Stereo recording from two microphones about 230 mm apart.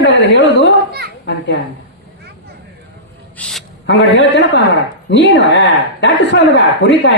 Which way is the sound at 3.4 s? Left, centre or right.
Centre.